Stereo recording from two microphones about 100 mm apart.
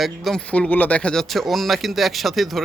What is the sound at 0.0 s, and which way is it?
Speech, centre (ahead or behind).